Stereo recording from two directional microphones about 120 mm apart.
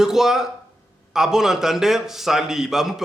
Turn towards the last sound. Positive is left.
turn(degrees=-5)  # may be behind; listen again after turning